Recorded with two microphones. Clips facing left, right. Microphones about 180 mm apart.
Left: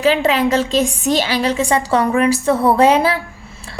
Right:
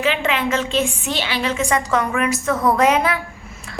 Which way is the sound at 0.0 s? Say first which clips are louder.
Left 6 dB; 35° left (ahead or behind).